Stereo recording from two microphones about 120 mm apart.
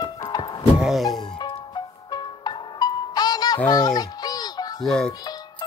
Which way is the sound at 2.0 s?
35° left (ahead or behind).